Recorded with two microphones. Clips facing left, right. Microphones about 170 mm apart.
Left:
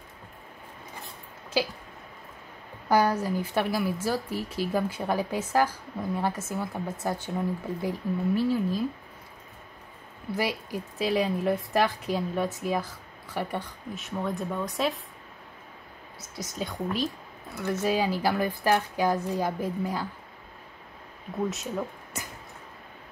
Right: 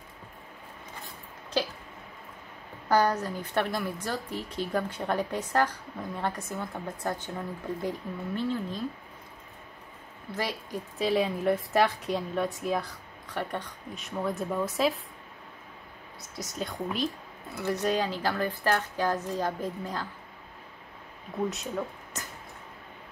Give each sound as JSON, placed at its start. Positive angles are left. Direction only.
{"t": 2.9, "sound": "speech", "side_deg": 10}
{"t": 10.3, "sound": "a woman's voice", "side_deg": 10}
{"t": 16.2, "sound": "a woman's voice", "side_deg": 0}
{"t": 21.5, "sound": "a woman's voice", "side_deg": 0}